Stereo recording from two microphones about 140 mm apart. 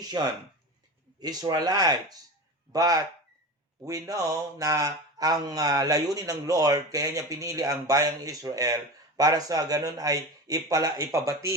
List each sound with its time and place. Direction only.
0.0 s speech: 30° right (ahead or behind)